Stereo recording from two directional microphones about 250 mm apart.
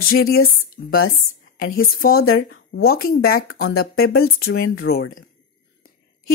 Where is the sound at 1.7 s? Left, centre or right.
Left.